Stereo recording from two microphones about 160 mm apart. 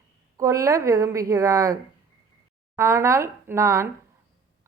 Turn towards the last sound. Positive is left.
turn(degrees=-20)  # may be behind; listen again after turning